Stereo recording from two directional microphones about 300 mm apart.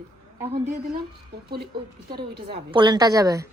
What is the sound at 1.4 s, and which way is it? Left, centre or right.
Speech, right.